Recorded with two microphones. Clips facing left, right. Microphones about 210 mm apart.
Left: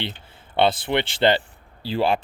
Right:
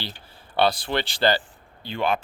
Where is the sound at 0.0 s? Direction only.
20° left (ahead or behind).